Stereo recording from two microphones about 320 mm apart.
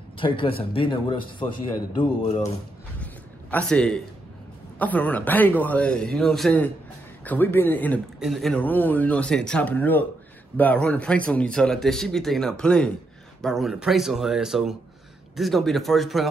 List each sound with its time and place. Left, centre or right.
0.2 s a man's voice: centre
3.0 s a sound: centre
4.7 s a man's voice: centre